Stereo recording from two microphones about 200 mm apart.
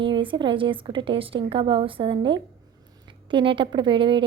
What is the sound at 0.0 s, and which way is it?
A woman's voice, 25° right (ahead or behind).